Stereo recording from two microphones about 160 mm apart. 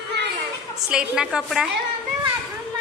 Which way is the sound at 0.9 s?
5° right (ahead or behind).